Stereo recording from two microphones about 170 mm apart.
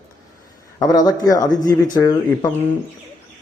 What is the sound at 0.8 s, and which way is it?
Speech, 20° left (ahead or behind).